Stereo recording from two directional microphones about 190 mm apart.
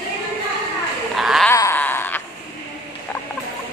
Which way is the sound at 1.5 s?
15° left (ahead or behind).